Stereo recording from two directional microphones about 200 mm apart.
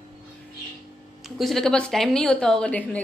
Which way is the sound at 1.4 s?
Centre (ahead or behind).